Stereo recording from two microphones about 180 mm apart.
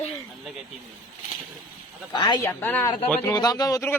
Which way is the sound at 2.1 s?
25° left (ahead or behind).